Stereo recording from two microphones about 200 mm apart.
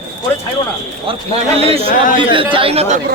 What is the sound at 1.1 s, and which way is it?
Speech, 30° right (ahead or behind).